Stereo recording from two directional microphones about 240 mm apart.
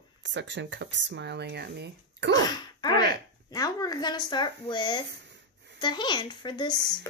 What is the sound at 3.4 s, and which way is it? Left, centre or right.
A child's voice, centre.